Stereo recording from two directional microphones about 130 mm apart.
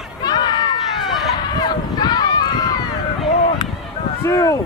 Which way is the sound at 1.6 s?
35° left (ahead or behind).